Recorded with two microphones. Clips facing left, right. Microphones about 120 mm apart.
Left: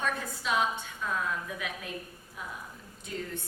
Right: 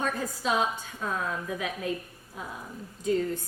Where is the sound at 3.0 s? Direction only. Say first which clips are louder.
Right 11 dB; 40° right (ahead or behind).